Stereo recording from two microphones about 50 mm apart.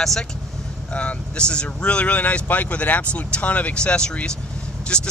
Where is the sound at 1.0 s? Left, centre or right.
Left.